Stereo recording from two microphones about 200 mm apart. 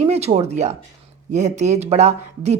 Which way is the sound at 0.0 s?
30° right (ahead or behind).